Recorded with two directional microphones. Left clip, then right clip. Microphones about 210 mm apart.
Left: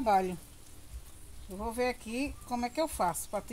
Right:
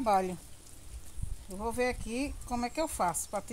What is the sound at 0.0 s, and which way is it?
Speech, 15° right (ahead or behind).